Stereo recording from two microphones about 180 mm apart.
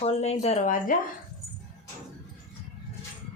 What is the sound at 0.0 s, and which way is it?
Speech, 35° left (ahead or behind).